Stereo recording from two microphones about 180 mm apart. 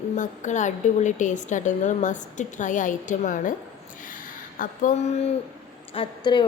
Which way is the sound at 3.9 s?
50° left (ahead or behind).